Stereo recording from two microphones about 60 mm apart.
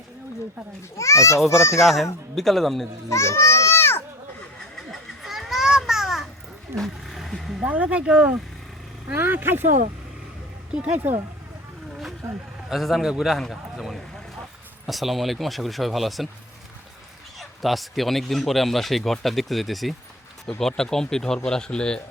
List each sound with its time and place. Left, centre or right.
0.9 s a child's voice: left
1.8 s speech: centre
3.1 s children playing: left
4.9 s children playing: centre
6.7 s music: centre
7.6 s speech: right
9.1 s speech: right
10.8 s speech: centre
12.6 s speech: centre
17.6 s speech: centre